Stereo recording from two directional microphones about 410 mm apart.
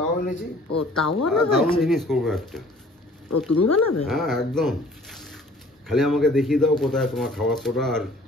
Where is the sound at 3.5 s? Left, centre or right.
Left.